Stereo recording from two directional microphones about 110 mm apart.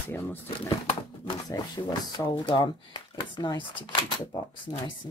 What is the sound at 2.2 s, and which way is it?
Speech, 15° left (ahead or behind).